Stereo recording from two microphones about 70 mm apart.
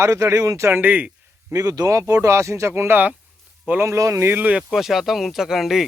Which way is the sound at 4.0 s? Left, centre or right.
Right.